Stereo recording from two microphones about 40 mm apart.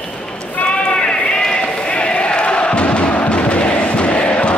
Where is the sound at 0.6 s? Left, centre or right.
Left.